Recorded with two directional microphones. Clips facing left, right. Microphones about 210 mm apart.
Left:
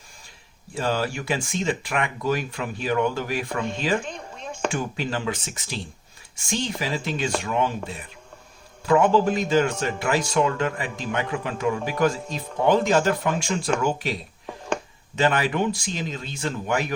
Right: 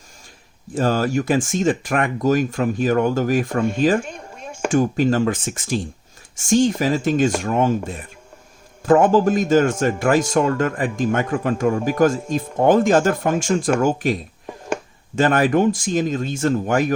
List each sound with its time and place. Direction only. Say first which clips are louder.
0.7 s speech: right 6 dB; 45° right (ahead or behind)
4.0 s a sound: right 1 dB; 10° right (ahead or behind)
4.7 s speech: right 10 dB; 45° right (ahead or behind)